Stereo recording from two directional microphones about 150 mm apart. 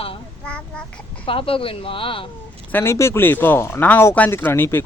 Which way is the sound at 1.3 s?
35° left (ahead or behind).